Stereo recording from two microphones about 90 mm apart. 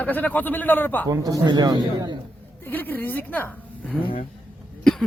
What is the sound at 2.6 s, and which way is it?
Speech, 20° left (ahead or behind).